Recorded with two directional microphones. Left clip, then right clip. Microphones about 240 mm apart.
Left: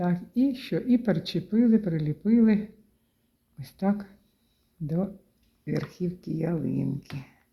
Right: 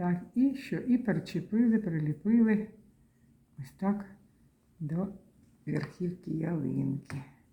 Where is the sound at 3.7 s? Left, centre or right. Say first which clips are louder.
Left 5 dB; left.